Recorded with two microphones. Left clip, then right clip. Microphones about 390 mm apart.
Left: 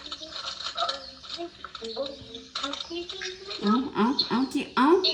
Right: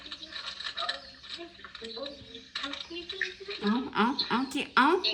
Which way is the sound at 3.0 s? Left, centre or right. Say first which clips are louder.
Even; centre.